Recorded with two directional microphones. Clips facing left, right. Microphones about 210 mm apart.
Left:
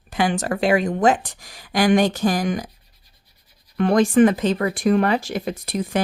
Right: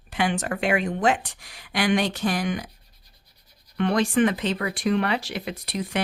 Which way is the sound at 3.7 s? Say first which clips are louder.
Left 6 dB; 45° left (ahead or behind).